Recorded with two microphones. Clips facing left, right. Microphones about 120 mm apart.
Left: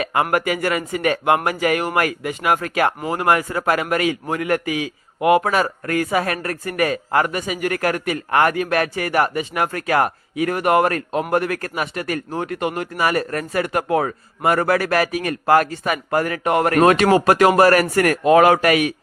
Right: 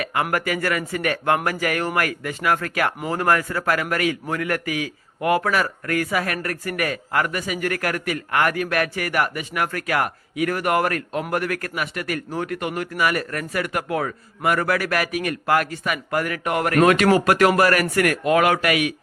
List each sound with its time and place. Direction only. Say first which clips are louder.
0.0 s a man's voice: left 4 dB; 25° left (ahead or behind)